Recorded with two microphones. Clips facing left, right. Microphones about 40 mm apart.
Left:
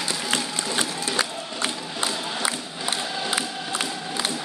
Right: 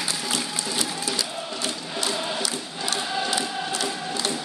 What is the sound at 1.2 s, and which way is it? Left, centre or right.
Crowd, left.